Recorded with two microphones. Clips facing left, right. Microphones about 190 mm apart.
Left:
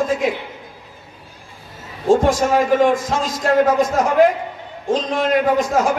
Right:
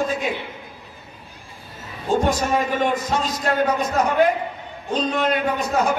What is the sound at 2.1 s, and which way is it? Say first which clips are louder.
A man's voice: left 5 dB; 90° left.